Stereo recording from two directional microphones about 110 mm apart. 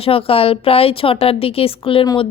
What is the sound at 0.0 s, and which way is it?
A woman's voice, 60° left (ahead or behind).